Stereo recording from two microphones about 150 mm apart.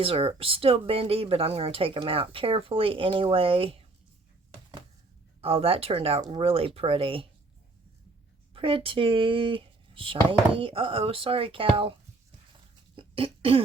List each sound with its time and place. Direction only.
0.0 s speech: 40° right (ahead or behind)
5.4 s speech: 40° right (ahead or behind)
8.5 s speech: 35° right (ahead or behind)
13.0 s cough: 35° right (ahead or behind)